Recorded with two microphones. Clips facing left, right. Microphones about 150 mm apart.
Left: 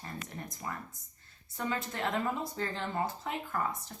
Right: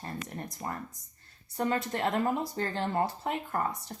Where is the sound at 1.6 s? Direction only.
35° right (ahead or behind).